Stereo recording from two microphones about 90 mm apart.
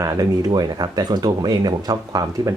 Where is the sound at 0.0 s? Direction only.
45° right (ahead or behind).